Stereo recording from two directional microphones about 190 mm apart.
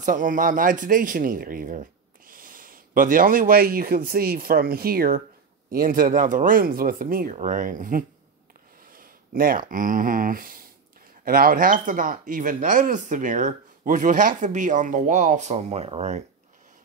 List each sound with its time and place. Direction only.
0.0 s speech: 45° right (ahead or behind)